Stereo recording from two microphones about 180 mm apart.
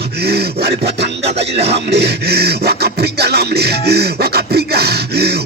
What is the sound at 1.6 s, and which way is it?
Beatboxing, 65° right (ahead or behind).